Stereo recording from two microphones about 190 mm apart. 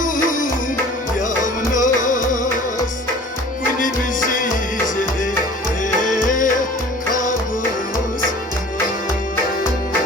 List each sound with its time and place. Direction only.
0.0 s music: 45° left (ahead or behind)
1.7 s music: 45° left (ahead or behind)
3.8 s music: 45° left (ahead or behind)
6.2 s music of bollywood: 45° left (ahead or behind)
7.1 s music: 45° left (ahead or behind)